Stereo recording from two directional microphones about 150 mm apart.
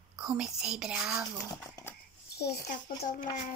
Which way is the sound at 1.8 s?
25° left (ahead or behind).